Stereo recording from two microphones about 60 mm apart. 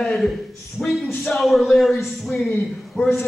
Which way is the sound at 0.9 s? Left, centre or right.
Centre.